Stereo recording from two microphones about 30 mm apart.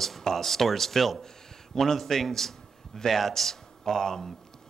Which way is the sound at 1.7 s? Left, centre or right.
Centre.